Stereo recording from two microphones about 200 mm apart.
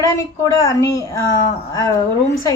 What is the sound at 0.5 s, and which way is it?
Speech, 20° left (ahead or behind).